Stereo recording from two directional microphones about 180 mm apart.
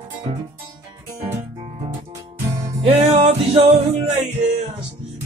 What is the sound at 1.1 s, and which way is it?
Music, 15° right (ahead or behind).